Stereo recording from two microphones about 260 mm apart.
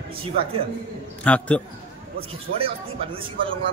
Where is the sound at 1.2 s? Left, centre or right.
Centre.